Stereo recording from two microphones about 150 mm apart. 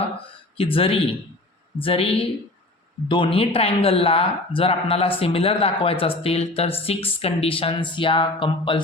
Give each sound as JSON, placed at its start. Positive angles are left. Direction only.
{"t": 0.5, "sound": "speech", "side_deg": 40}